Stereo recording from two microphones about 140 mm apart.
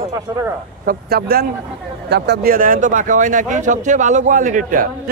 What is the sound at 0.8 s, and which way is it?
A man's voice, 90° right.